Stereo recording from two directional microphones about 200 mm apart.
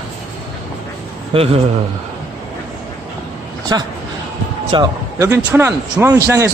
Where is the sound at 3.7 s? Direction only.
20° right (ahead or behind).